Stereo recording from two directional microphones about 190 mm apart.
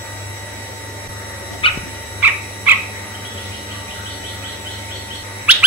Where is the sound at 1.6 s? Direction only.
30° left (ahead or behind).